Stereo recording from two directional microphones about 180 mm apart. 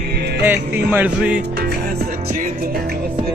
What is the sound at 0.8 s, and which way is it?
Speech, 5° right (ahead or behind).